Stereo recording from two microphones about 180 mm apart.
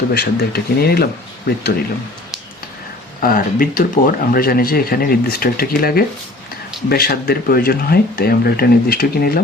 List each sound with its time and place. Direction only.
0.1 s speech: 60° left (ahead or behind)
3.2 s speech: 50° left (ahead or behind)